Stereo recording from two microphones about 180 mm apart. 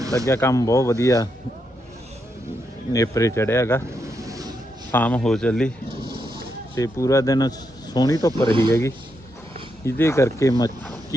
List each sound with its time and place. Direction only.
0.0 s a sound: 20° right (ahead or behind)
0.3 s speech: 15° left (ahead or behind)
2.9 s speech: 20° left (ahead or behind)
4.3 s a sound: 20° right (ahead or behind)
4.9 s a man's voice: 10° left (ahead or behind)
6.0 s a sound: 60° right (ahead or behind)
6.7 s a man's voice: 15° left (ahead or behind)
8.4 s speech: 25° right (ahead or behind)
9.8 s speech: 15° left (ahead or behind)